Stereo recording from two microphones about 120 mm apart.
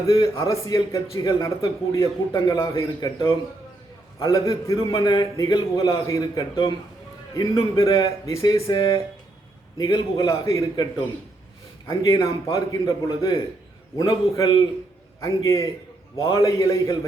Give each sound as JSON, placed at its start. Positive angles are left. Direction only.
{"t": 0.1, "sound": "a man's voice", "side_deg": 30}
{"t": 2.3, "sound": "a man's voice", "side_deg": 40}
{"t": 8.7, "sound": "a man's voice", "side_deg": 40}
{"t": 11.9, "sound": "a man's voice", "side_deg": 25}